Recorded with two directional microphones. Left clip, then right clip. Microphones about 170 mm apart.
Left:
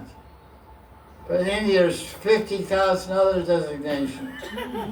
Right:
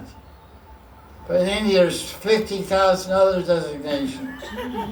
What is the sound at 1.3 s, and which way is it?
Speech, 40° right (ahead or behind).